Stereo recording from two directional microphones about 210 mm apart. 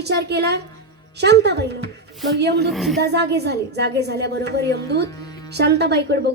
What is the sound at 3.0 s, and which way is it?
A woman's voice, 50° right (ahead or behind).